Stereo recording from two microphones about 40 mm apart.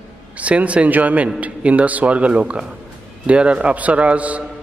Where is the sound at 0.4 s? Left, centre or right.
Right.